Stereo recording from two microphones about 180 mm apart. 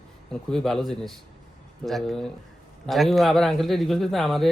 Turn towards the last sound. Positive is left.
turn(degrees=0)  # may be behind; listen again after turning